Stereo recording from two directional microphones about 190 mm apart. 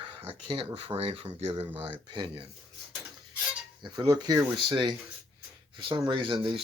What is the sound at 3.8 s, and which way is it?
Speech, 20° right (ahead or behind).